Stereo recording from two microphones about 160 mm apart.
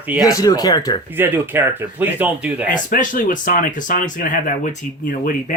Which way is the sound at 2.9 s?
55° left (ahead or behind).